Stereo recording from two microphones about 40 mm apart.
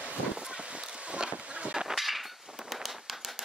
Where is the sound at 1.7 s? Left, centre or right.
Centre.